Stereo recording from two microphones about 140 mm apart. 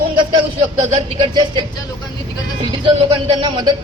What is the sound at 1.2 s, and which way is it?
Speech, 35° right (ahead or behind).